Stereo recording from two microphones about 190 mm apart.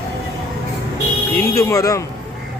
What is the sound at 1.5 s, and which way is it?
Speech, 15° left (ahead or behind).